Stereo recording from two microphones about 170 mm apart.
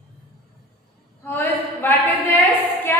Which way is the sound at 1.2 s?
10° left (ahead or behind).